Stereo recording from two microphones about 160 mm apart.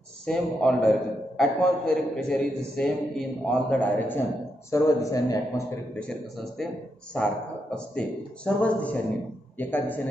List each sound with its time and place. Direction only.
0.3 s a man's voice: 5° left (ahead or behind); by 5.4 s 20° left (ahead or behind)
7.2 s a man's voice: 5° left (ahead or behind)